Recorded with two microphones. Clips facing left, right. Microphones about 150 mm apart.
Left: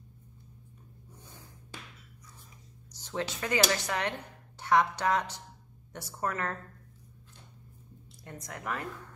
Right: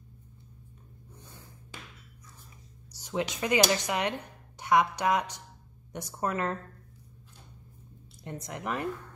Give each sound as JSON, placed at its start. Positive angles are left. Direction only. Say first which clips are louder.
{"t": 2.9, "sound": "speech", "louder": "right 3 dB", "side_deg": -15}
{"t": 8.2, "sound": "speech", "louder": "right 5 dB", "side_deg": -20}